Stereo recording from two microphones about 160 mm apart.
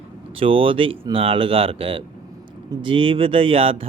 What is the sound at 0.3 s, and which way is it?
Speech, 35° right (ahead or behind).